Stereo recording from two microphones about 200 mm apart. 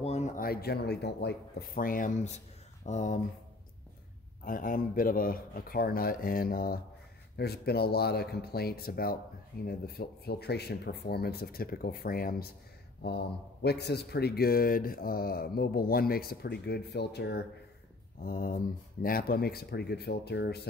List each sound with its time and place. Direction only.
0.0 s a sound: 30° left (ahead or behind)
0.4 s speech: 50° left (ahead or behind)
4.5 s speech: 45° left (ahead or behind)